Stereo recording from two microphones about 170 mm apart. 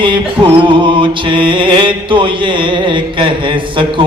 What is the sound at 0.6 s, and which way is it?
Mantra, 30° right (ahead or behind).